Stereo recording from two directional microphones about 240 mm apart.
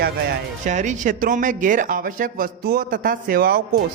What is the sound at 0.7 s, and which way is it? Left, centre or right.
Speech, right.